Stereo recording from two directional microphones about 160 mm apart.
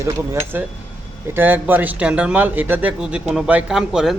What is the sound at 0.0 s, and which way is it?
A man's voice, 15° right (ahead or behind).